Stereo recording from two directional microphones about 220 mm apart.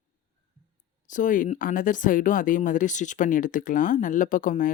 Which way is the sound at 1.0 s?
35° left (ahead or behind).